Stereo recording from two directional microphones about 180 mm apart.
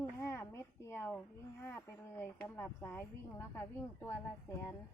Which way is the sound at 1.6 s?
10° left (ahead or behind).